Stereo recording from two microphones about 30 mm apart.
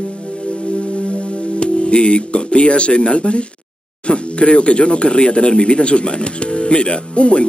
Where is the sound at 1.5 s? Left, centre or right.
Left.